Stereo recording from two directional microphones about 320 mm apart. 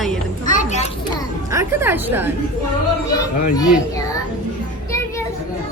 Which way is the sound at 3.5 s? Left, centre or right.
Centre.